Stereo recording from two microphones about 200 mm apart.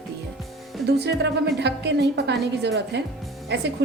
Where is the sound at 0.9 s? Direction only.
55° right (ahead or behind).